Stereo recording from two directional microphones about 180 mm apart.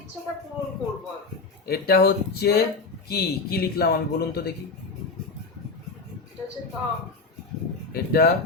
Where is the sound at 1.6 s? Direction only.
60° left (ahead or behind).